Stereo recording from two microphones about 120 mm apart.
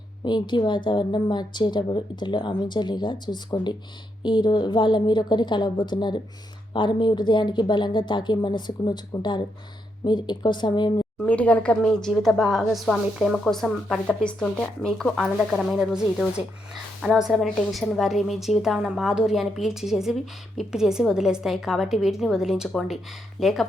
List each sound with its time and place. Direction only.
0.3 s speech: 40° left (ahead or behind)
11.3 s a woman's voice: 10° left (ahead or behind)